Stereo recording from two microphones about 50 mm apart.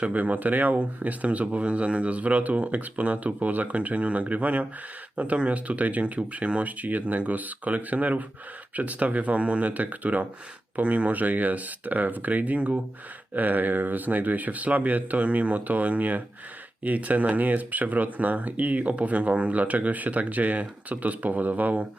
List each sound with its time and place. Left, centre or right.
0.0 s speech: right